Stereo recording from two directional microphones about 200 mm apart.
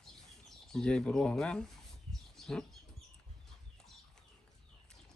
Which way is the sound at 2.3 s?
Centre (ahead or behind).